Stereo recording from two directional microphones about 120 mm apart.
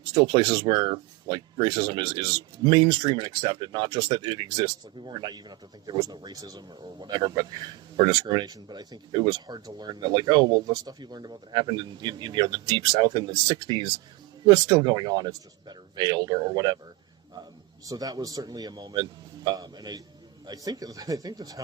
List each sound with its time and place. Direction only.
0.1 s speech: 40° right (ahead or behind)
17.8 s speech: 30° right (ahead or behind)